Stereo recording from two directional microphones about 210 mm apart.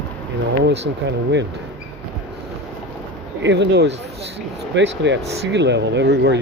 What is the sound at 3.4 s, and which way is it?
Speech, 55° right (ahead or behind).